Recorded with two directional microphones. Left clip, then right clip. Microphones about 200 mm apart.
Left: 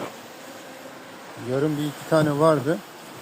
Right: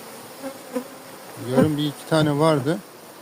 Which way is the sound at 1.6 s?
20° right (ahead or behind).